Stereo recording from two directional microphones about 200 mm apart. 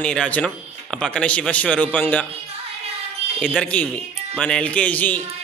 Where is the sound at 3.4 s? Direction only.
5° left (ahead or behind).